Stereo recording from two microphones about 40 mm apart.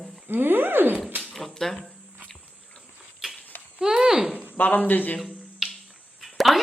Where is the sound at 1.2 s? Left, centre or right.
Centre.